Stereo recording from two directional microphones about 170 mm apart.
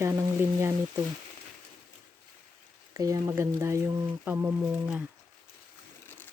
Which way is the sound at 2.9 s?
20° right (ahead or behind).